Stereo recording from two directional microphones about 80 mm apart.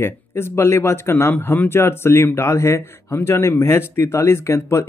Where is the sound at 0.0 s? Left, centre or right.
Left.